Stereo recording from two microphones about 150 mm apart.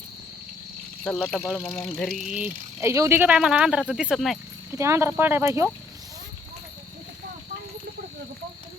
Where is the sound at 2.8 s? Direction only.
15° right (ahead or behind); by 4.3 s centre (ahead or behind).